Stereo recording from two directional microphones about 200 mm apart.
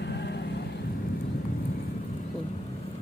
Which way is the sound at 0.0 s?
60° left (ahead or behind).